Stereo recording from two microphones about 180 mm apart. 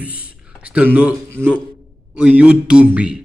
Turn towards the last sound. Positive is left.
turn(degrees=-5)  # may be behind; listen again after turning